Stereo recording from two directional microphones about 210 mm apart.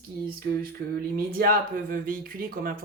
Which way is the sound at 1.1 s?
45° right (ahead or behind).